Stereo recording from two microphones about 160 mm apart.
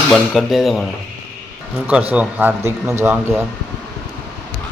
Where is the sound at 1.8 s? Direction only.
10° right (ahead or behind).